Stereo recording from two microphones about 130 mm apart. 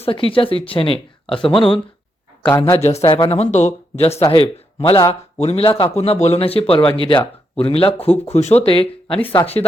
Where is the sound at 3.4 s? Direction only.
60° left (ahead or behind).